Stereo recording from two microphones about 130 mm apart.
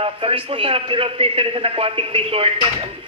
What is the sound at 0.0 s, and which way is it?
Speech, 45° right (ahead or behind).